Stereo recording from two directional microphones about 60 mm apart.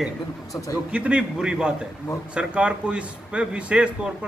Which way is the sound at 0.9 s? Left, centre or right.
Centre.